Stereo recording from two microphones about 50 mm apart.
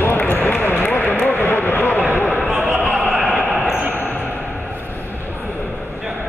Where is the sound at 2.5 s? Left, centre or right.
Centre.